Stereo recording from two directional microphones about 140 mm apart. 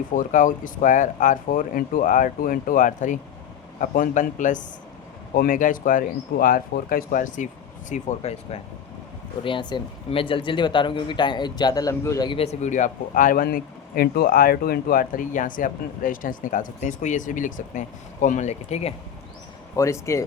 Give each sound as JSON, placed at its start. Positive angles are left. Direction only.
{"t": 0.1, "sound": "speech", "side_deg": 65}
{"t": 5.3, "sound": "speech", "side_deg": 80}
{"t": 7.9, "sound": "speech", "side_deg": 55}
{"t": 9.4, "sound": "speech", "side_deg": 35}
{"t": 12.4, "sound": "speech", "side_deg": 55}
{"t": 19.7, "sound": "speech", "side_deg": 20}